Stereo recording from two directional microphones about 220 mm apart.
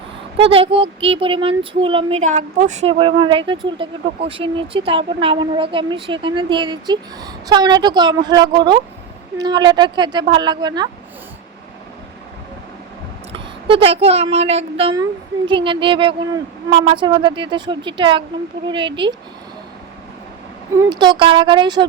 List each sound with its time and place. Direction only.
0.3 s speech: 25° right (ahead or behind)
13.3 s speech: 25° right (ahead or behind)
20.7 s speech: 20° right (ahead or behind)